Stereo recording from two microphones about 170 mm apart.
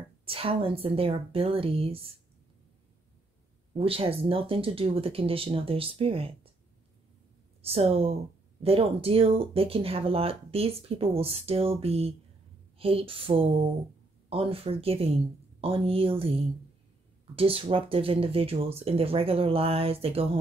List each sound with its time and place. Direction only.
0.2 s speech: 35° right (ahead or behind)
3.7 s speech: 35° right (ahead or behind)
7.6 s speech: 35° right (ahead or behind)